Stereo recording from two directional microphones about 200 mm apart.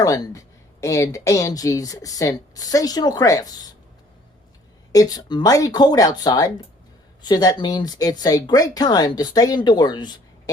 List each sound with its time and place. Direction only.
0.0 s speech: 15° left (ahead or behind)
4.9 s speech: 20° left (ahead or behind)